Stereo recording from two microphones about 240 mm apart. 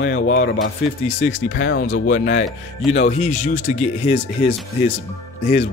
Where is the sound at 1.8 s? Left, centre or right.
Left.